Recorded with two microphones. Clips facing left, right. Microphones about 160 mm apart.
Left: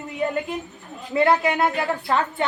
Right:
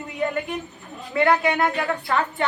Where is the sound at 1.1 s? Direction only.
25° left (ahead or behind).